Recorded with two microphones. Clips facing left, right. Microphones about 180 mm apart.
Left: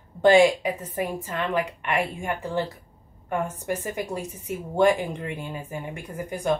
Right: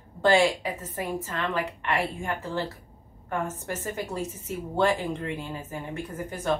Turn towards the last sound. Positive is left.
turn(degrees=15)  # may be behind; listen again after turning